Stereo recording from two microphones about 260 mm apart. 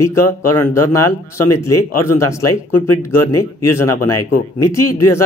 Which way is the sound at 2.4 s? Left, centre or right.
Left.